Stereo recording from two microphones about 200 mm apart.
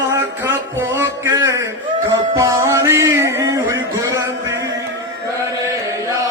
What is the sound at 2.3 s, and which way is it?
Music, 15° right (ahead or behind).